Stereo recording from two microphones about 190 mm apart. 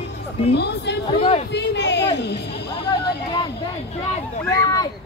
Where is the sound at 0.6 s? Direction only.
60° left (ahead or behind).